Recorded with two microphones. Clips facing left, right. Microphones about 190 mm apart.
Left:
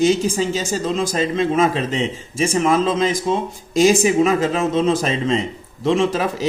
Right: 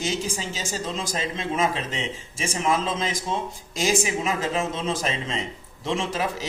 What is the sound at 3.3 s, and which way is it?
Speech, 65° left (ahead or behind).